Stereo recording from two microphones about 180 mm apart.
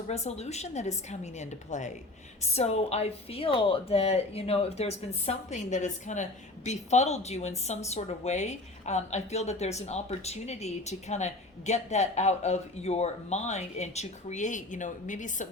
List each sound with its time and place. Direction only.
0.1 s a woman's voice: 40° left (ahead or behind)